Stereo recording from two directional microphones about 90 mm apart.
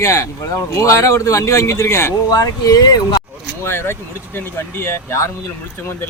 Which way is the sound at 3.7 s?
25° left (ahead or behind).